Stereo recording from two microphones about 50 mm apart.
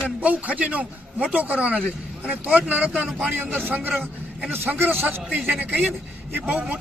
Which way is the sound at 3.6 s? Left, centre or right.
Right.